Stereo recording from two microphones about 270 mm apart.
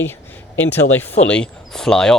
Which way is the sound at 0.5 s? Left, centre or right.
Centre.